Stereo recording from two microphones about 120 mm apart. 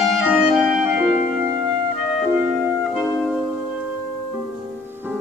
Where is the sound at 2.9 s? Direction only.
5° right (ahead or behind).